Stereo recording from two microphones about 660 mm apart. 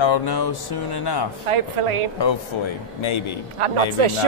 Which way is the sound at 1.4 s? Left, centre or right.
Right.